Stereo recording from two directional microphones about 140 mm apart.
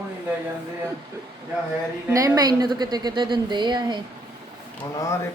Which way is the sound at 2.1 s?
25° right (ahead or behind).